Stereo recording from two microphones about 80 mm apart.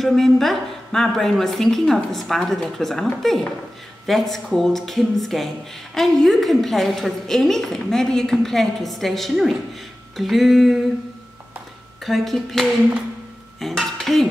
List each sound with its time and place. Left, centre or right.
0.0 s a woman's voice: centre
12.0 s a woman's voice: centre